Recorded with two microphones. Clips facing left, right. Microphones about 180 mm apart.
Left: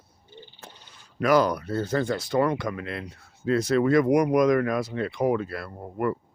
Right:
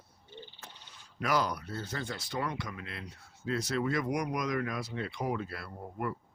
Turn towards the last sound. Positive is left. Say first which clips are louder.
# left 9 dB
turn(degrees=60)  # may be behind; listen again after turning